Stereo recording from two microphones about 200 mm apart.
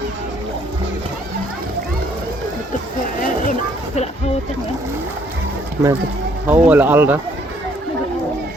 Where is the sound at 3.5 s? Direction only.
35° left (ahead or behind).